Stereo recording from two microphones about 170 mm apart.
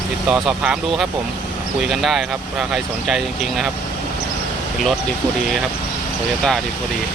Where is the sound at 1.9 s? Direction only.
Centre (ahead or behind).